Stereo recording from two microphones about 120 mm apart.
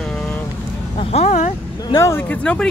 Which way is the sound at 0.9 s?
60° left (ahead or behind).